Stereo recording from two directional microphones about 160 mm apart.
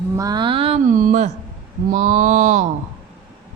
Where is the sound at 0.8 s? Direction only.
55° right (ahead or behind).